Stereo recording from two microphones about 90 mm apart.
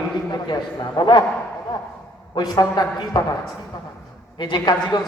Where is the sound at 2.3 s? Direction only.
55° left (ahead or behind).